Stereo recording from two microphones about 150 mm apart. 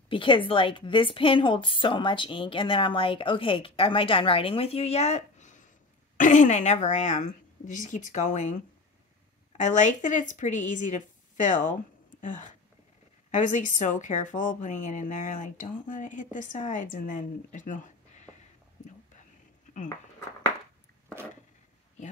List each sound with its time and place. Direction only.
0.1 s a woman's voice: 35° left (ahead or behind); by 8.5 s 55° left (ahead or behind)
9.6 s a woman's voice: 55° left (ahead or behind)
18.8 s whispering: 55° left (ahead or behind)